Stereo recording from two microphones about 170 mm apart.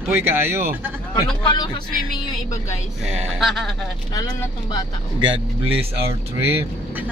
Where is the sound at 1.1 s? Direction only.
25° left (ahead or behind).